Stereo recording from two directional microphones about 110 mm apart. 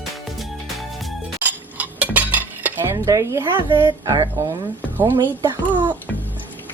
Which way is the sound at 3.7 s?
50° right (ahead or behind).